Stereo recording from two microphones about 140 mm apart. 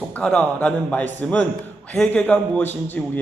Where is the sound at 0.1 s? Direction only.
10° left (ahead or behind).